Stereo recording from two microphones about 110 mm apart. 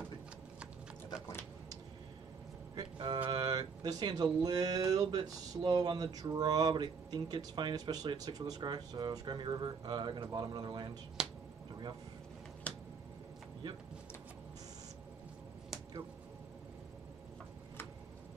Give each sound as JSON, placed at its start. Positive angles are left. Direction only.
{"t": 2.7, "sound": "speech", "side_deg": -40}
{"t": 11.2, "sound": "finger snapping", "side_deg": -5}
{"t": 12.7, "sound": "finger snapping", "side_deg": 10}